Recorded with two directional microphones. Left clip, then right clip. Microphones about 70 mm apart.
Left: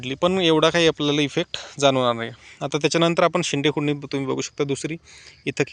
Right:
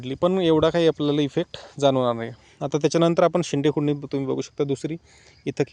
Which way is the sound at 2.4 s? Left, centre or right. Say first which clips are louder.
Right 2 dB; right.